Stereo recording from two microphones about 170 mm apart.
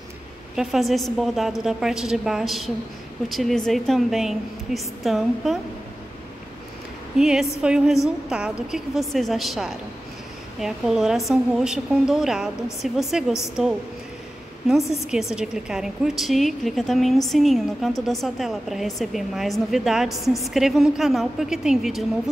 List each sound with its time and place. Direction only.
0.6 s a woman's voice: centre (ahead or behind)
7.2 s a woman's voice: 5° right (ahead or behind)
14.9 s a woman's voice: centre (ahead or behind)